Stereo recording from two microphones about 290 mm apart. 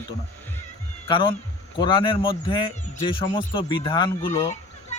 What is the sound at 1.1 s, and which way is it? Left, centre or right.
Speech, centre.